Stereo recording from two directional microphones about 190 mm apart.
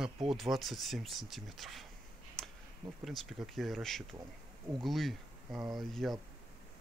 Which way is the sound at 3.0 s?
Centre (ahead or behind).